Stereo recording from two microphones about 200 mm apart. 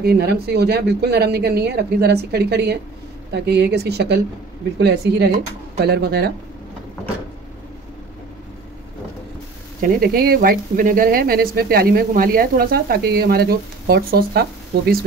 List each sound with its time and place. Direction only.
0.0 s a woman's voice: 55° right (ahead or behind)
9.8 s a woman's voice: 45° right (ahead or behind)